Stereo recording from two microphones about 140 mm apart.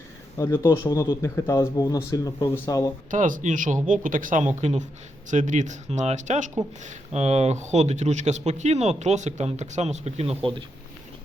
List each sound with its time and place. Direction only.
0.3 s speech: 20° left (ahead or behind)
3.1 s speech: 70° right (ahead or behind)
4.5 s speech: 55° right (ahead or behind)